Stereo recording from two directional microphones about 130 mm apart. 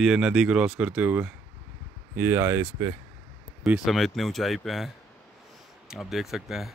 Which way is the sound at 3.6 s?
5° right (ahead or behind).